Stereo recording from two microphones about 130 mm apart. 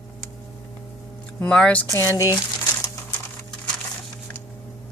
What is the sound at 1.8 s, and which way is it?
Speech, 25° left (ahead or behind).